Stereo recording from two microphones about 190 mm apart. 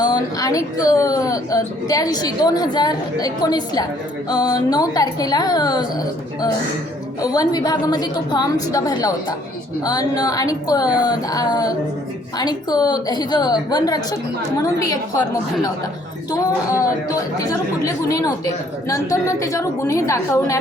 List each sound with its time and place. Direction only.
0.0 s speech: 20° left (ahead or behind)
16.3 s a woman's voice: 20° left (ahead or behind)